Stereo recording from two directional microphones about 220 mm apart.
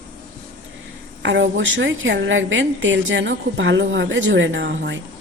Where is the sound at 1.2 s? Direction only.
55° right (ahead or behind).